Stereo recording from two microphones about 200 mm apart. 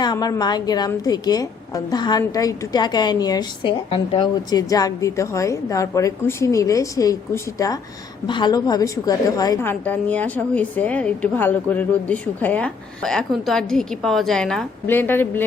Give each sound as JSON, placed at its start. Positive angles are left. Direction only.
{"t": 0.0, "sound": "a woman's voice", "side_deg": 20}